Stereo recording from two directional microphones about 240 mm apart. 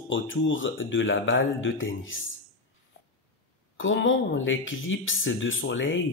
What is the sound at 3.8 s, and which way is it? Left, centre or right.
Speech, left.